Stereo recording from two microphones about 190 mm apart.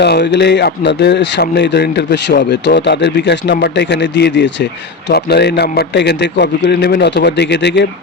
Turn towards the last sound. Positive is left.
turn(degrees=65)  # may be behind; listen again after turning